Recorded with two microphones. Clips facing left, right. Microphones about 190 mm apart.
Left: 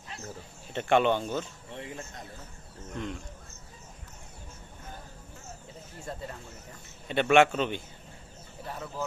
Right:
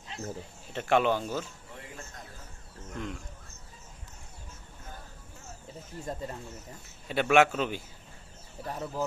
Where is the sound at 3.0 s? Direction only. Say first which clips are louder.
Left 2 dB; centre (ahead or behind).